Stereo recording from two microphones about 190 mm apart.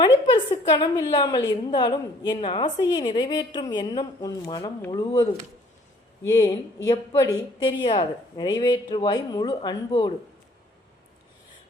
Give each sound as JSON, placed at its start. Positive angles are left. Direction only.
{"t": 0.7, "sound": "a woman's voice", "side_deg": 25}